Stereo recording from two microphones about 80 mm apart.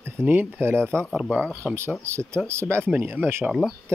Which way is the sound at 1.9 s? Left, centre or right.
Right.